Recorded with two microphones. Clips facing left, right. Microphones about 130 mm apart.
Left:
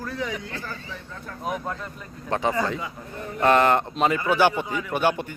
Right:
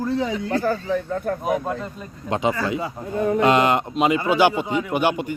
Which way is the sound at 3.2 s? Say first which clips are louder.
Right 15 dB; 65° right (ahead or behind).